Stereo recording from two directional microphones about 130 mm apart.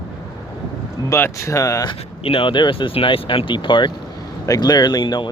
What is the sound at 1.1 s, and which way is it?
Speech, 20° left (ahead or behind).